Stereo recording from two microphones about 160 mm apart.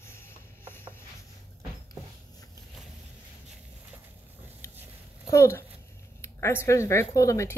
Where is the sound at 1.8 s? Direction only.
25° left (ahead or behind).